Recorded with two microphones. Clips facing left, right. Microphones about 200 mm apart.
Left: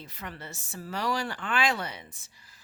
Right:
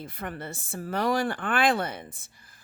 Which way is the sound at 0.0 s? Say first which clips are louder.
Right 6 dB; 50° right (ahead or behind).